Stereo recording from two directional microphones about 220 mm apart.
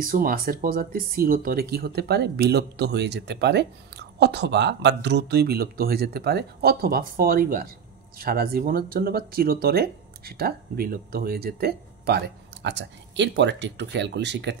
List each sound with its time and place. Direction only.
0.0 s speech: 40° right (ahead or behind)